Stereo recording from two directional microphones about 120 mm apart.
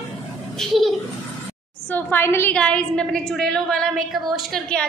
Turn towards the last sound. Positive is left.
turn(degrees=5)  # may be behind; listen again after turning